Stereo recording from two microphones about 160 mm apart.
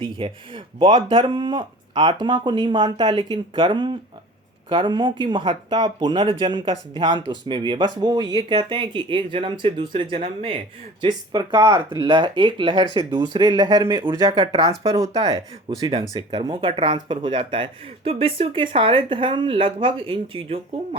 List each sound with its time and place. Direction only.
0.0 s speech: 35° right (ahead or behind)